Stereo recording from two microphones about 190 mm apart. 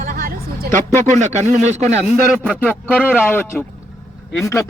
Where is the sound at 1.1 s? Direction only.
40° right (ahead or behind).